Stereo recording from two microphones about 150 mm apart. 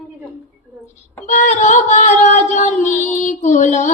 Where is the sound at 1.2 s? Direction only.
55° left (ahead or behind).